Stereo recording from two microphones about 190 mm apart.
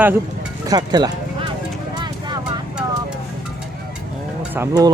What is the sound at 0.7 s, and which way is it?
Speech, 20° right (ahead or behind).